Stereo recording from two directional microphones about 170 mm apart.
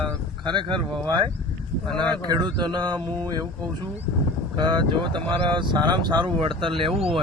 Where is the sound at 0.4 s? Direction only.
30° right (ahead or behind).